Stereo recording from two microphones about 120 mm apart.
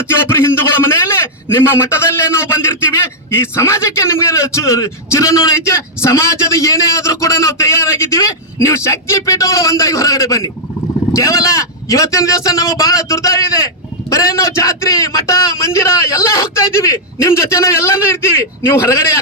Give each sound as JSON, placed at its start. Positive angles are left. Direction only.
{"t": 0.1, "sound": "a man's voice", "side_deg": 20}